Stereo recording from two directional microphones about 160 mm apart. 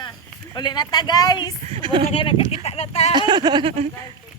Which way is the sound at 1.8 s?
30° right (ahead or behind).